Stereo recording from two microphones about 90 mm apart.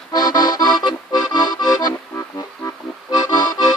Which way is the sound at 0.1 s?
50° left (ahead or behind).